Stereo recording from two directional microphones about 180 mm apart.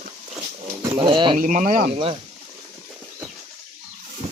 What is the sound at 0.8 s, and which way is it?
Speech, 25° right (ahead or behind).